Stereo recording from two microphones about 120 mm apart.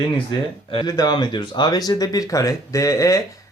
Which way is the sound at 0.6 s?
45° left (ahead or behind).